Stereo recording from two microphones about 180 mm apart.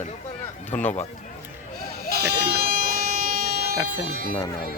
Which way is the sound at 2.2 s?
60° right (ahead or behind).